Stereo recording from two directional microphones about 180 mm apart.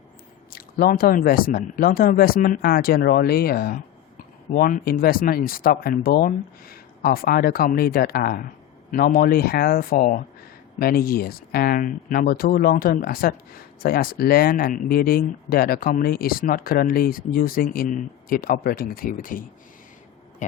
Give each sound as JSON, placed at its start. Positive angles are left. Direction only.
{"t": 0.5, "sound": "speech", "side_deg": 55}